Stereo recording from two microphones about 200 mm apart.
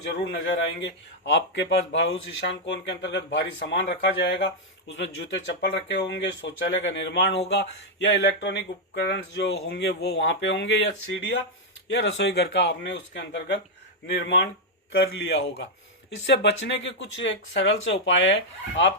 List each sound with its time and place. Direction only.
0.0 s a man's voice: 60° left (ahead or behind)